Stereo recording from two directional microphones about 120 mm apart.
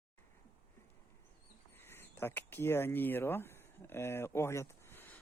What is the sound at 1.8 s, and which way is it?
Speech, 20° left (ahead or behind).